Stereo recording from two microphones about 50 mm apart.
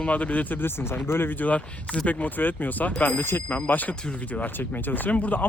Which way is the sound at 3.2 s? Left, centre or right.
Left.